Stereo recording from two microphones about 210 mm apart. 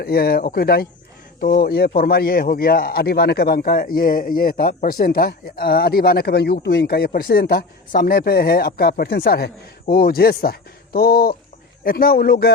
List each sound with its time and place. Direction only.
0.0 s speech: 45° left (ahead or behind)